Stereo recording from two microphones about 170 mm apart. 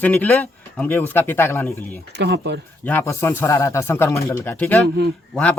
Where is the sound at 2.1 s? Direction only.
90° right.